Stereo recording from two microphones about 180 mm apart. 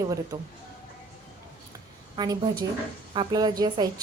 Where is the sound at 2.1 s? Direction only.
25° right (ahead or behind).